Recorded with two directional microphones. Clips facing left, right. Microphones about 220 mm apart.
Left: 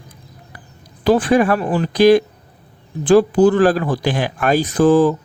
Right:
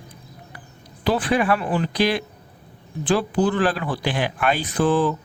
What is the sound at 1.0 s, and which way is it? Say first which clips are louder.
Speech: left 7 dB; 45° left (ahead or behind).